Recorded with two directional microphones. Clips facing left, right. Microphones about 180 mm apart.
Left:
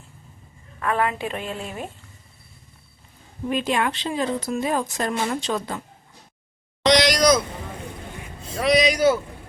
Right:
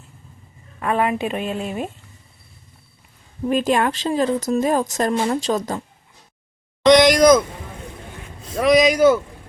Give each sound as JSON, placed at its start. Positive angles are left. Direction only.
{"t": 0.8, "sound": "a woman's voice", "side_deg": -20}
{"t": 3.5, "sound": "speech", "side_deg": -45}
{"t": 6.8, "sound": "speech", "side_deg": -50}
{"t": 8.6, "sound": "speech", "side_deg": -45}